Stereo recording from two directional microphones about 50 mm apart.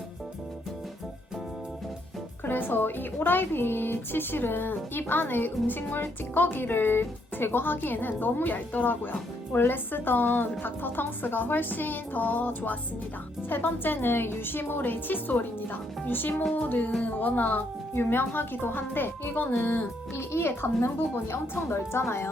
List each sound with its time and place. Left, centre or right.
2.4 s a woman's voice: left
17.9 s speech: left
20.6 s a woman's voice: left